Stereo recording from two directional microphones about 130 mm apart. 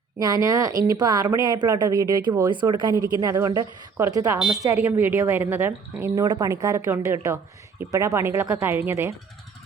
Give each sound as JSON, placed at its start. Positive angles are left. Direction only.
{"t": 0.2, "sound": "a woman's voice", "side_deg": -30}
{"t": 4.4, "sound": "speech", "side_deg": -5}
{"t": 4.6, "sound": "a woman's voice", "side_deg": -25}
{"t": 6.1, "sound": "a woman's voice", "side_deg": -30}